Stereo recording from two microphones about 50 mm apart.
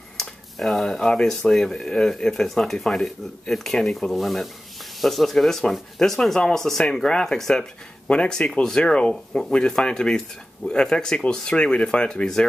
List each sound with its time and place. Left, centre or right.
0.2 s speech: centre
8.1 s speech: centre